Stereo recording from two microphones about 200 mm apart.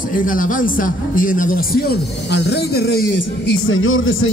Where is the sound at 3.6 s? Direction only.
90° left.